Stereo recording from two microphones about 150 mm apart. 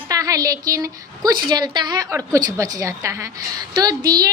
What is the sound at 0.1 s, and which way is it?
A woman's voice, 25° right (ahead or behind).